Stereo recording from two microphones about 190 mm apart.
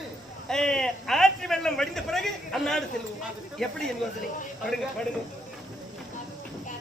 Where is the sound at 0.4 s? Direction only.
5° left (ahead or behind).